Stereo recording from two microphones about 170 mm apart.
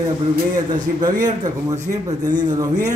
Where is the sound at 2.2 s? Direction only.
25° right (ahead or behind).